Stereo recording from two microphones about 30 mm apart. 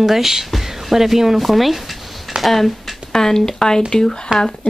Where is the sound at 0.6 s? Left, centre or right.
Centre.